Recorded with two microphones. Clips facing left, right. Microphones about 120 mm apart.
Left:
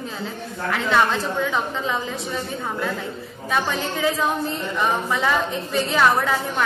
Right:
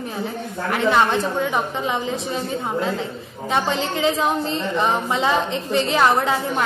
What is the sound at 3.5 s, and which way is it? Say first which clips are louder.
A woman's voice: right 2 dB; 20° right (ahead or behind).